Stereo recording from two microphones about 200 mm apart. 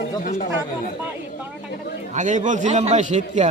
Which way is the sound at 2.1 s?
35° right (ahead or behind).